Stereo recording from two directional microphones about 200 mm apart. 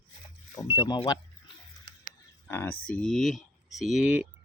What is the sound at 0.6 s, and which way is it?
Speech, 20° left (ahead or behind).